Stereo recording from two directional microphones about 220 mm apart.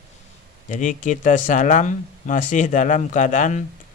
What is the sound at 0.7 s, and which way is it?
Speech, 35° left (ahead or behind).